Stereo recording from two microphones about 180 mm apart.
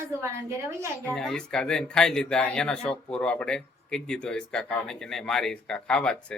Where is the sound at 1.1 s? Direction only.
5° left (ahead or behind).